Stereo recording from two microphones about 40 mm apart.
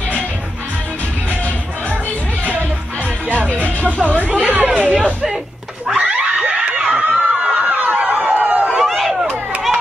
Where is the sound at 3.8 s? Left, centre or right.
Right.